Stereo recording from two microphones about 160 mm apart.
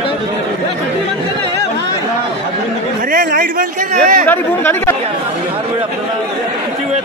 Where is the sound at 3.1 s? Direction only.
60° right (ahead or behind).